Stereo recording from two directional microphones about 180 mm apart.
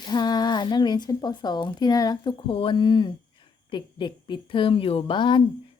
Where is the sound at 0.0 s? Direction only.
25° left (ahead or behind).